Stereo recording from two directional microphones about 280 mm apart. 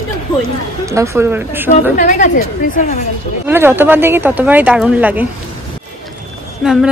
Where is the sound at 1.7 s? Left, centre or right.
Left.